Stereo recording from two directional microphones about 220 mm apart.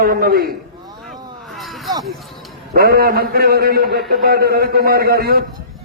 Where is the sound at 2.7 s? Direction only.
45° right (ahead or behind).